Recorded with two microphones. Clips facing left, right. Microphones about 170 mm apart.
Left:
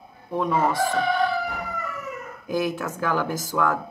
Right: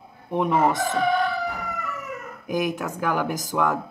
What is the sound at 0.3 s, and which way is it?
Speech, 20° right (ahead or behind).